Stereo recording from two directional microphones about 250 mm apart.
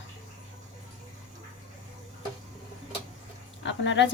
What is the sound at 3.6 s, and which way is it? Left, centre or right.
Speech, left.